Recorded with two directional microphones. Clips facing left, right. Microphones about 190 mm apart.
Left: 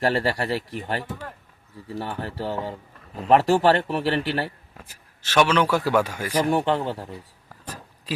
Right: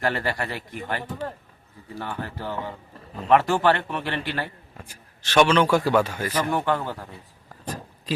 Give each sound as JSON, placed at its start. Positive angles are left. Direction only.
{"t": 0.0, "sound": "a man's voice", "side_deg": 35}
{"t": 4.8, "sound": "a man's voice", "side_deg": 5}
{"t": 6.5, "sound": "speech", "side_deg": 30}
{"t": 7.6, "sound": "a sound", "side_deg": 10}